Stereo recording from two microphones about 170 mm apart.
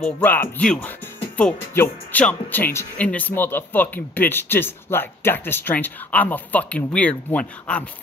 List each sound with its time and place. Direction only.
0.0 s speech: 10° left (ahead or behind)